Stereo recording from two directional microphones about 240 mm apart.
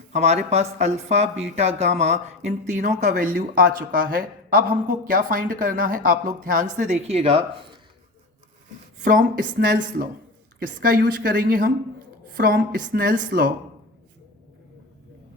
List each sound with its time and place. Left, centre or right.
0.1 s speech: right
9.0 s speech: right